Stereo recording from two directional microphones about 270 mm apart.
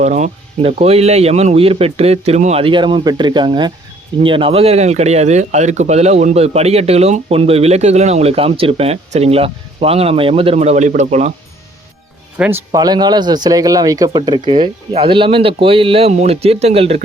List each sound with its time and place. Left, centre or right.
0.0 s speech: right
12.4 s speech: centre